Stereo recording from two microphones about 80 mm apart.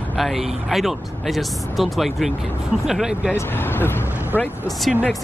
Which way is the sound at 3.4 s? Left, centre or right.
Left.